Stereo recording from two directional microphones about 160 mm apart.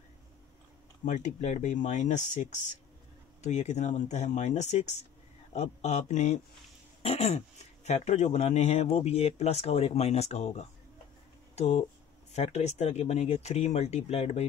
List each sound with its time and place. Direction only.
1.0 s speech: 50° left (ahead or behind)
3.4 s speech: 45° left (ahead or behind)